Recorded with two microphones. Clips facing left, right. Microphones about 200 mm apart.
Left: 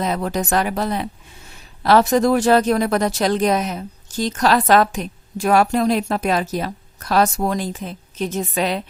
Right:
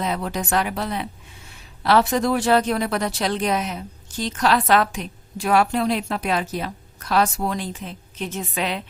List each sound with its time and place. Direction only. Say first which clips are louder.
0.0 s a woman's voice: left 4 dB; 45° left (ahead or behind)